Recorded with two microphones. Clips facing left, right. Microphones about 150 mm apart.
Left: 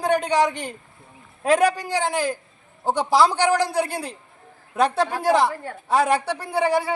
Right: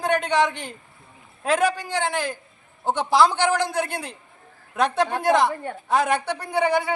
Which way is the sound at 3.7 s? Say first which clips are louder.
Left 2 dB; 35° left (ahead or behind).